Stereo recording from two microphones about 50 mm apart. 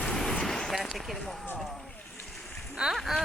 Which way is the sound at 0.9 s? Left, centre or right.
Centre.